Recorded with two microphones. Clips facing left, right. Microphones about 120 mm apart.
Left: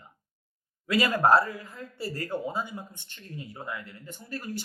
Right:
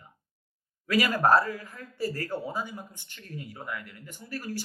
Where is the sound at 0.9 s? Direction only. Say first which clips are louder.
Left 1 dB; 20° left (ahead or behind).